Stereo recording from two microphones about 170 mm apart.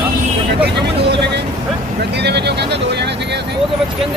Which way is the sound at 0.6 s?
80° right.